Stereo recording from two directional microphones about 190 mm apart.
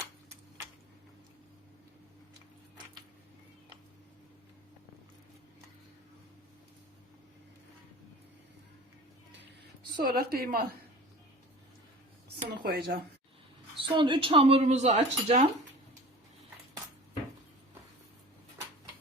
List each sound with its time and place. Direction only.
10.0 s a woman's voice: 50° right (ahead or behind)
12.4 s a sound: 50° right (ahead or behind)
13.7 s speech: 25° right (ahead or behind)